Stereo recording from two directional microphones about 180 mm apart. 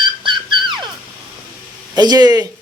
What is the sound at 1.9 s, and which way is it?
Speech, 20° right (ahead or behind).